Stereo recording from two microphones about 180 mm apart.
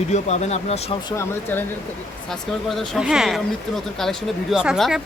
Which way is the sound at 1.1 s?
10° left (ahead or behind).